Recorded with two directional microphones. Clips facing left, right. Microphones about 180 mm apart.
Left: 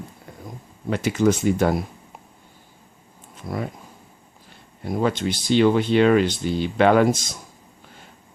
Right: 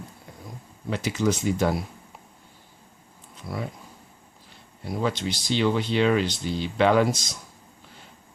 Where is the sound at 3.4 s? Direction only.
50° left (ahead or behind).